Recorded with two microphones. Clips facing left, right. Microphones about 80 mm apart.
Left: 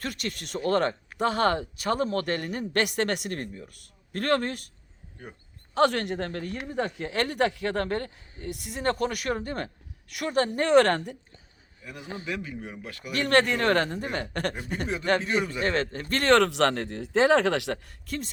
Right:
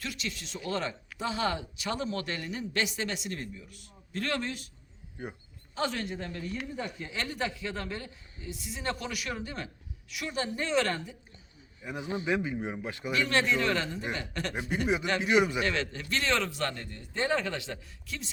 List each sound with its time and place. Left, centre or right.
0.0 s speech: left
5.7 s speech: left
11.8 s a man's voice: right
13.1 s speech: left
15.2 s speech: centre
15.6 s speech: left
18.0 s speech: left